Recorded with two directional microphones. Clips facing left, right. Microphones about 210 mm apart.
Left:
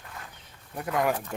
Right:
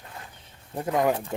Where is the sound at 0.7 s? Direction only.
25° right (ahead or behind).